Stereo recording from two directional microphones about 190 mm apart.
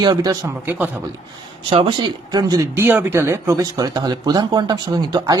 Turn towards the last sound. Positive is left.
turn(degrees=-20)  # may be behind; listen again after turning